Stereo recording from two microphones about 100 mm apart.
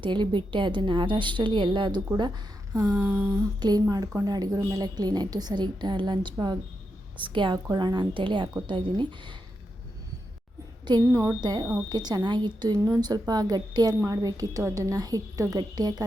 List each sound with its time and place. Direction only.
0.0 s a woman's voice: 55° right (ahead or behind)
11.0 s a woman's voice: 30° right (ahead or behind)
11.3 s a woman's voice: 45° right (ahead or behind)